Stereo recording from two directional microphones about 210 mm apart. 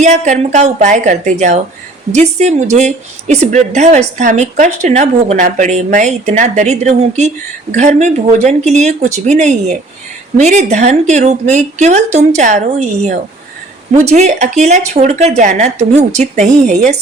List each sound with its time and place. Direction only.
0.0 s a woman's voice: 35° right (ahead or behind)